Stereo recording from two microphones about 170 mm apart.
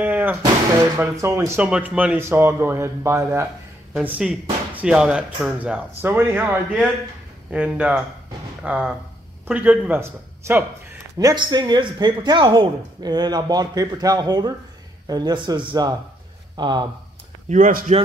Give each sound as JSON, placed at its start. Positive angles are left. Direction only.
{"t": 0.0, "sound": "a man's voice", "side_deg": -10}
{"t": 17.5, "sound": "speech", "side_deg": -50}